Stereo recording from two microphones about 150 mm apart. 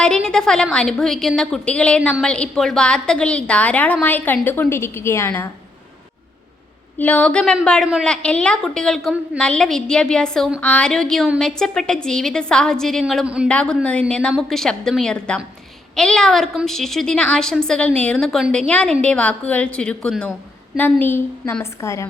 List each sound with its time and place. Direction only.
0.3 s a woman's voice: 5° left (ahead or behind)
7.0 s a woman's voice: 10° left (ahead or behind); by 13.5 s 5° right (ahead or behind)
13.5 s a woman's voice: 5° left (ahead or behind)